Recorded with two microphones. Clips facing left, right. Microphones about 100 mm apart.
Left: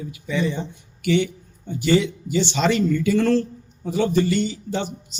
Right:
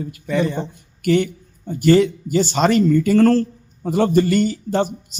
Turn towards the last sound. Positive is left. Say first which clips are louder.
# right 6 dB
turn(degrees=-50)  # may be behind; listen again after turning